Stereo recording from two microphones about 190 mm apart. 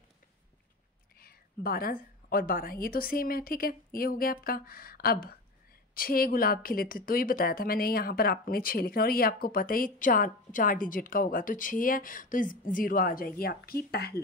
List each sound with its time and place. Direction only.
1.1 s a woman's voice: 50° left (ahead or behind)